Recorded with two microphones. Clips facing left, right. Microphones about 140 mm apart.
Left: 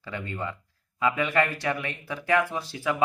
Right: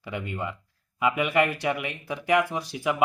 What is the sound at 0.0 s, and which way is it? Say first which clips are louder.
Speech: right 1 dB; 15° right (ahead or behind).